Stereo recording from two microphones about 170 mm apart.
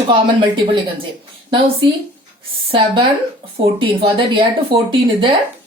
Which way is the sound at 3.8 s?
30° right (ahead or behind).